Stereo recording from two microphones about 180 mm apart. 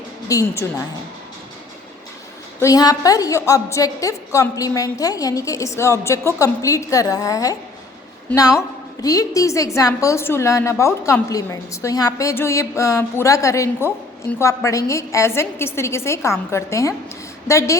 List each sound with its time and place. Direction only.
0.3 s a woman's voice: 15° left (ahead or behind)
2.6 s a woman's voice: 20° left (ahead or behind)